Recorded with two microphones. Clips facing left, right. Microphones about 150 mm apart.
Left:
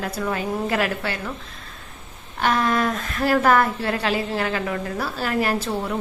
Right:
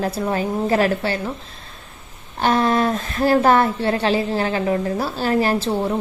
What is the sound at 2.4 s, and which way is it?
A woman's voice, 30° right (ahead or behind).